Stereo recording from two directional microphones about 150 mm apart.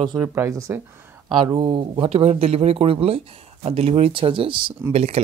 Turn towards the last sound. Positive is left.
turn(degrees=-45)  # may be behind; listen again after turning